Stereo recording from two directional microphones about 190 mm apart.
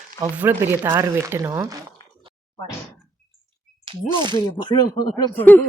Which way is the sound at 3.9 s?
25° right (ahead or behind).